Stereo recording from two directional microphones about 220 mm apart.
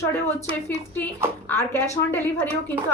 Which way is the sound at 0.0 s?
10° left (ahead or behind).